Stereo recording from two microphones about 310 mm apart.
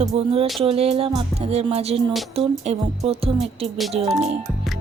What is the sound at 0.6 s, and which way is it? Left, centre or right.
Speech, centre.